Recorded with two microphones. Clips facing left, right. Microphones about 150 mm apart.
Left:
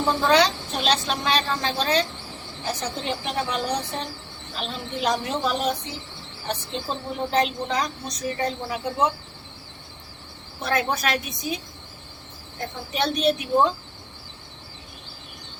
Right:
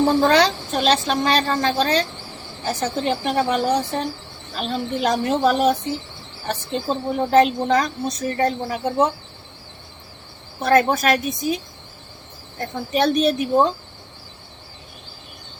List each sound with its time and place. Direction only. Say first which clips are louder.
0.0 s a woman's voice: right 4 dB; 45° right (ahead or behind)
10.6 s a woman's voice: right 8 dB; 50° right (ahead or behind)
12.9 s a woman's voice: right 5 dB; 45° right (ahead or behind)